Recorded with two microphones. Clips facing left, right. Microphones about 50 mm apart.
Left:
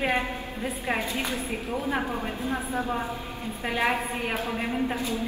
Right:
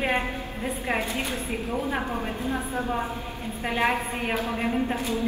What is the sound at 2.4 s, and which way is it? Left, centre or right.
Speech, left.